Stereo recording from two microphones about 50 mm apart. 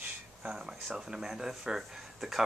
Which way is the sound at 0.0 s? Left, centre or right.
Right.